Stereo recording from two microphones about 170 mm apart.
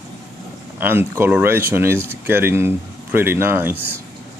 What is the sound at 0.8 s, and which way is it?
Speech, 15° right (ahead or behind).